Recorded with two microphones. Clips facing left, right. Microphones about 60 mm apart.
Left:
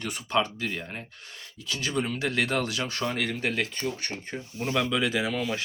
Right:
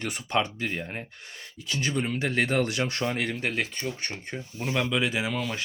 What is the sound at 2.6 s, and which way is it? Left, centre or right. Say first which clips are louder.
Speech: right 2 dB; right.